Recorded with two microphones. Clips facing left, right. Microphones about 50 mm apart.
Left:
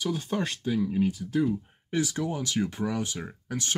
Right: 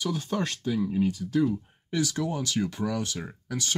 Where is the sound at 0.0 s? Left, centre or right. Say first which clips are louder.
Even; centre.